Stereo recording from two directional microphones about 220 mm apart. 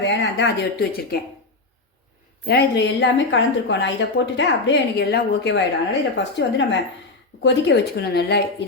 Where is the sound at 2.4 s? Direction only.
50° left (ahead or behind).